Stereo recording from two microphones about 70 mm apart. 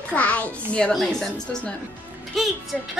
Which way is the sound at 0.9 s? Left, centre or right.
Centre.